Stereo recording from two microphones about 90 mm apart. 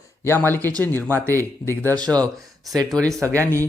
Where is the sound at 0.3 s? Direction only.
25° left (ahead or behind).